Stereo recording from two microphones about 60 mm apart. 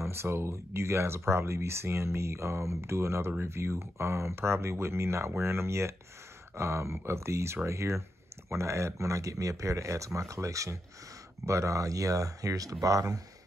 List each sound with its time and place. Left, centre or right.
0.0 s speech: right